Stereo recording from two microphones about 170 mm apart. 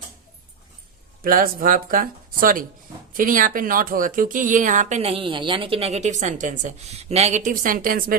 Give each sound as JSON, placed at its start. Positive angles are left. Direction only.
{"t": 1.2, "sound": "speech", "side_deg": -55}